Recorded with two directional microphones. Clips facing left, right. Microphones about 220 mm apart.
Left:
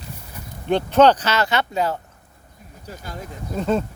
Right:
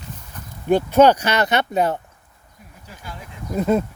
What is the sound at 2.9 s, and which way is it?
Speech, 40° left (ahead or behind).